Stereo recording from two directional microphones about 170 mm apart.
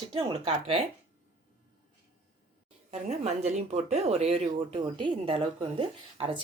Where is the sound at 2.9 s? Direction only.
40° right (ahead or behind).